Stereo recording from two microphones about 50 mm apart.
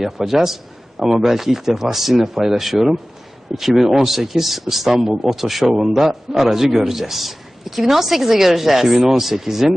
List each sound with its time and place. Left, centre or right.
0.0 s a man's voice: centre